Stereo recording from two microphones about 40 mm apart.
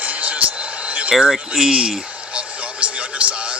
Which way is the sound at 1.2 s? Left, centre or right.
Centre.